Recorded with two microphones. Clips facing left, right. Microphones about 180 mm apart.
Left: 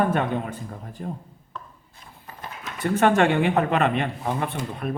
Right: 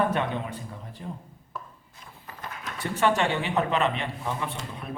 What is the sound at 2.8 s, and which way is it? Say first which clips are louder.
A man's voice: left 5 dB; 55° left (ahead or behind).